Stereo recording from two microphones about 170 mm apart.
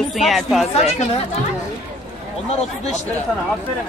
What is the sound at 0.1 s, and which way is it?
Speech, centre (ahead or behind).